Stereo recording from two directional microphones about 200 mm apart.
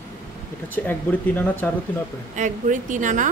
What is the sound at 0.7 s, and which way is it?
Speech, 10° left (ahead or behind).